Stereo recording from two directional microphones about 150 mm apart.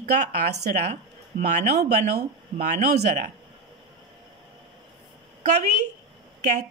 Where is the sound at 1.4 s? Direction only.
50° right (ahead or behind).